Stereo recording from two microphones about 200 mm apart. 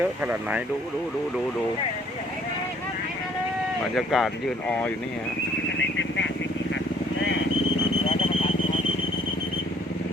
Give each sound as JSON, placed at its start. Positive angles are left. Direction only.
{"t": 0.0, "sound": "speech", "side_deg": -5}
{"t": 3.9, "sound": "speech", "side_deg": 0}
{"t": 6.0, "sound": "vehicle", "side_deg": 65}